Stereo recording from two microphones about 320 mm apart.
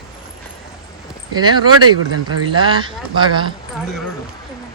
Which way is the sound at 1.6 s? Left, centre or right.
Right.